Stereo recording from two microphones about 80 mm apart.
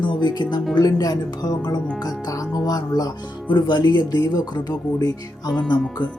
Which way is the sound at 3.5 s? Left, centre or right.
Left.